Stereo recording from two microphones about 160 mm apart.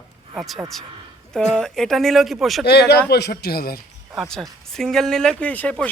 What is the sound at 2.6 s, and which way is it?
A man's voice, 90° left.